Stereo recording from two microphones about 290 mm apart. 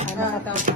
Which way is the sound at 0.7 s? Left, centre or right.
Right.